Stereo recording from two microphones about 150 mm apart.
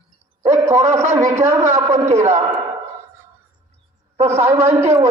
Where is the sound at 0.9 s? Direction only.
20° right (ahead or behind).